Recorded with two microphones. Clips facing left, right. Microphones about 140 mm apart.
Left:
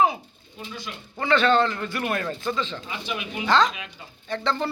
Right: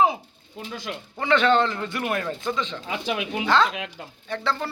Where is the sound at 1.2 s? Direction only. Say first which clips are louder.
Even; 15° right (ahead or behind).